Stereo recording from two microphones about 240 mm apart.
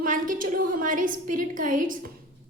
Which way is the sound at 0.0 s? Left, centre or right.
Right.